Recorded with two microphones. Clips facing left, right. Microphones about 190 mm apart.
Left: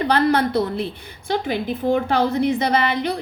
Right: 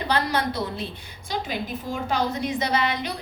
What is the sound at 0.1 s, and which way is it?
A woman's voice, 55° left (ahead or behind).